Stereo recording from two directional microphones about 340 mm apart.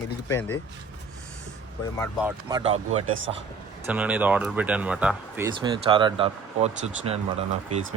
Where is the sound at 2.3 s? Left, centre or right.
Centre.